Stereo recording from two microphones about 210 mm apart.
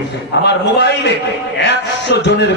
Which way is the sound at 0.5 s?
55° left (ahead or behind).